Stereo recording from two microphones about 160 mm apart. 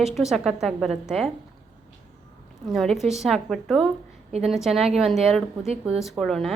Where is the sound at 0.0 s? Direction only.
Centre (ahead or behind).